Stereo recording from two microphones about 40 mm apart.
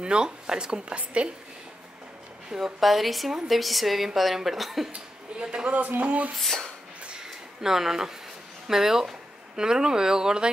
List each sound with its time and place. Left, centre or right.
0.0 s speech: right
2.8 s a woman's voice: centre
4.9 s speech: right
5.8 s speech: right
6.3 s speech: centre
7.2 s a sound: centre
8.6 s speech: centre